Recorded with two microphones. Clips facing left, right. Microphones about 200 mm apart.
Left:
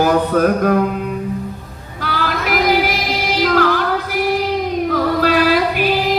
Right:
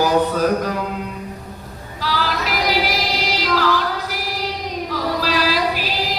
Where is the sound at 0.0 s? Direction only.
55° left (ahead or behind).